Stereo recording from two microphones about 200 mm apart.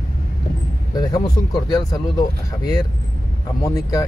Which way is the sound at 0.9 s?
20° left (ahead or behind).